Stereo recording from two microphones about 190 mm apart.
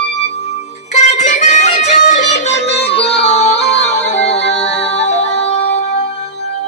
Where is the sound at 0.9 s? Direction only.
40° left (ahead or behind).